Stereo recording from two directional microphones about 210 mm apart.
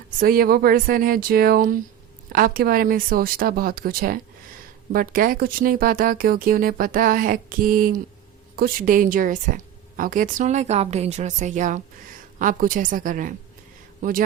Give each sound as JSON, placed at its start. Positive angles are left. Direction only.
{"t": 0.2, "sound": "speech", "side_deg": -45}